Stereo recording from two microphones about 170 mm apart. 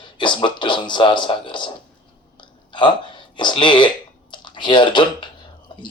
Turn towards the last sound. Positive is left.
turn(degrees=25)  # may be behind; listen again after turning